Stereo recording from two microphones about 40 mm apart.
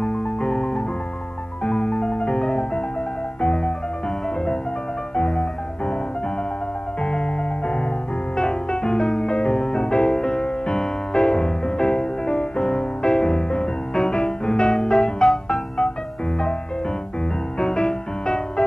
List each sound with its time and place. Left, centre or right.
0.0 s music: left
5.1 s music: centre
7.0 s music: left
17.6 s music: centre